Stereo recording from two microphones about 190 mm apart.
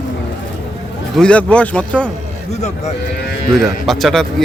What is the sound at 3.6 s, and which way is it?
Speech, centre (ahead or behind).